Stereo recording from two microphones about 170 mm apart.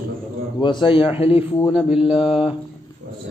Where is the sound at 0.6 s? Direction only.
25° left (ahead or behind).